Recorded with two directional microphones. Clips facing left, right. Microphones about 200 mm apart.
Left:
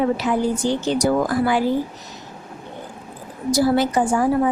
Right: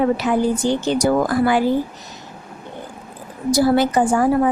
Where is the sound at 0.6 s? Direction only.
55° right (ahead or behind).